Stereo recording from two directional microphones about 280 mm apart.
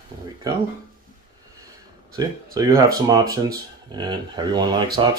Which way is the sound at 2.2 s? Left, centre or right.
Centre.